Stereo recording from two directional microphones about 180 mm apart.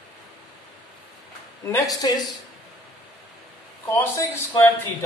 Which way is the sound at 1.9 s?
20° left (ahead or behind).